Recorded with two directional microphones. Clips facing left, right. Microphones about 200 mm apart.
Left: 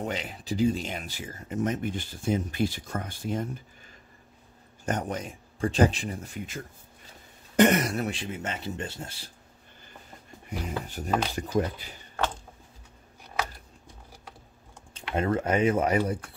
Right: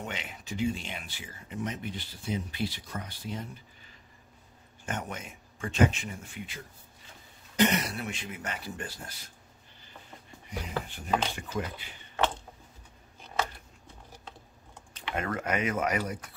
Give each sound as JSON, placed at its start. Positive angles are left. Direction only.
{"t": 0.0, "sound": "speech", "side_deg": 35}
{"t": 4.8, "sound": "speech", "side_deg": 35}
{"t": 10.6, "sound": "speech", "side_deg": 40}
{"t": 15.0, "sound": "speech", "side_deg": 30}